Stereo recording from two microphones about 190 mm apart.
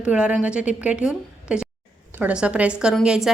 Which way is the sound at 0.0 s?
5° right (ahead or behind).